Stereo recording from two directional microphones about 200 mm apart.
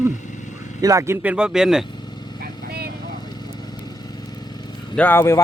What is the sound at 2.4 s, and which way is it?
Lawn mower, 50° right (ahead or behind).